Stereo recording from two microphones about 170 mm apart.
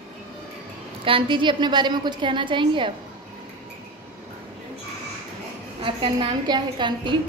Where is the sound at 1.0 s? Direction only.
30° right (ahead or behind).